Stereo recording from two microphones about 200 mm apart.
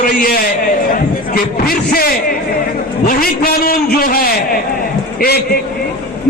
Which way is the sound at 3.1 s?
45° left (ahead or behind).